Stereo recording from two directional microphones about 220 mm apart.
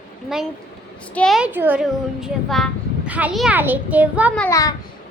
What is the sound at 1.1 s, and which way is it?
A child's voice, centre (ahead or behind).